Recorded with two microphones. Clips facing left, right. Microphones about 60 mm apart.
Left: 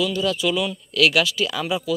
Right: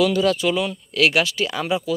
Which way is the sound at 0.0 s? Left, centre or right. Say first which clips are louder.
Right 4 dB; right.